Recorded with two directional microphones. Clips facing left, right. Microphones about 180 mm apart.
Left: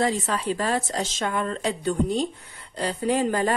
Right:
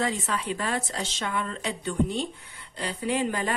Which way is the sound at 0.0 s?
35° left (ahead or behind).